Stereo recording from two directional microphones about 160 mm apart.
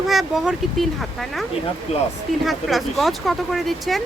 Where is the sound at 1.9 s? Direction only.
45° left (ahead or behind).